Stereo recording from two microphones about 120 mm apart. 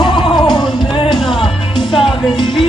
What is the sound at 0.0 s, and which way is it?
Music, 40° left (ahead or behind).